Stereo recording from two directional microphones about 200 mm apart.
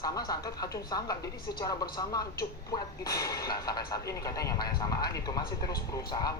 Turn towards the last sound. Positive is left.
turn(degrees=20)  # may be behind; listen again after turning